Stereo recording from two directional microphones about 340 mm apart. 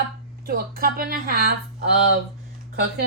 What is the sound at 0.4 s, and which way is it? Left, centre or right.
A woman's voice, right.